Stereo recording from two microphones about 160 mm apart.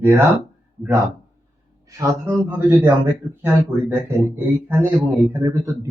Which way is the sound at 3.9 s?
15° right (ahead or behind).